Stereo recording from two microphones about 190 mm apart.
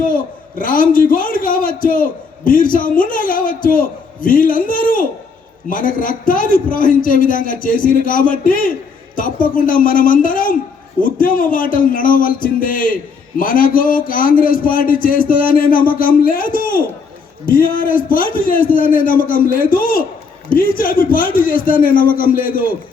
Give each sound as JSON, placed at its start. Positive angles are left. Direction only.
{"t": 0.6, "sound": "speech", "side_deg": 45}